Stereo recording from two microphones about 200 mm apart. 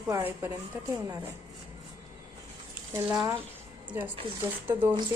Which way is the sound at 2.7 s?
5° right (ahead or behind).